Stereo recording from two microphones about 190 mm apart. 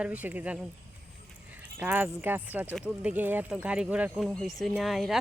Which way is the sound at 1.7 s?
10° right (ahead or behind).